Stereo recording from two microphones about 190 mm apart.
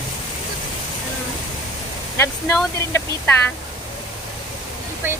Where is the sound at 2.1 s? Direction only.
10° left (ahead or behind).